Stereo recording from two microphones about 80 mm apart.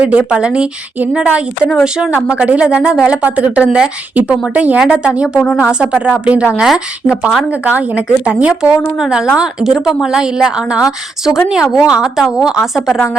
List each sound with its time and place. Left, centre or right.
0.0 s a woman's voice: centre
2.4 s a woman's voice: centre
6.6 s a woman's voice: centre
7.6 s a woman's voice: centre